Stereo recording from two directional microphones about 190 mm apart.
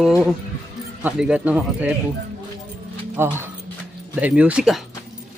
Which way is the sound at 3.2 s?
10° right (ahead or behind).